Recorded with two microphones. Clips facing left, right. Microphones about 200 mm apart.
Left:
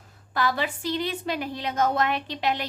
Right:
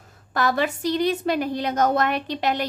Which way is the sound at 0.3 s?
45° right (ahead or behind).